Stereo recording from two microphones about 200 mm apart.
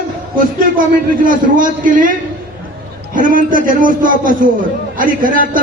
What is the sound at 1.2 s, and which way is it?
Speech, 40° right (ahead or behind).